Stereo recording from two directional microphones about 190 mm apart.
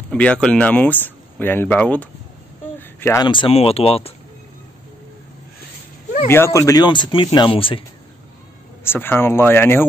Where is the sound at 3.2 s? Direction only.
25° left (ahead or behind).